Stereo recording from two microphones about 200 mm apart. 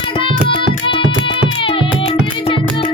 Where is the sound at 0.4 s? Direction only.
25° left (ahead or behind).